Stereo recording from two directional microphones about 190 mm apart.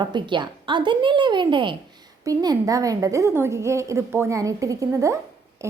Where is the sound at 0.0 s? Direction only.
25° right (ahead or behind).